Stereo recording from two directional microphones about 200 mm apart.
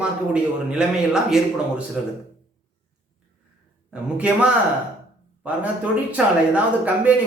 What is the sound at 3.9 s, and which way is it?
Speech, 5° right (ahead or behind).